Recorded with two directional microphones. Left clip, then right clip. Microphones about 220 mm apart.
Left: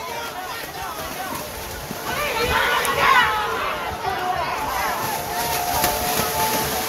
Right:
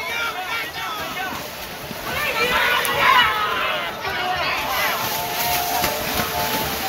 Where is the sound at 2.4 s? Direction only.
50° left (ahead or behind).